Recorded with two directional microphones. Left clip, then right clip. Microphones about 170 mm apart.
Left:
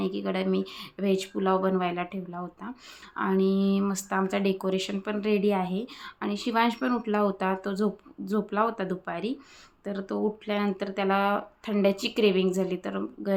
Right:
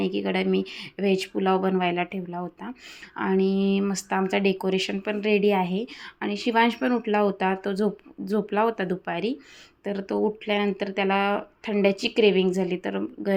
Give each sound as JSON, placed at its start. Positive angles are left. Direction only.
{"t": 0.0, "sound": "a woman's voice", "side_deg": -20}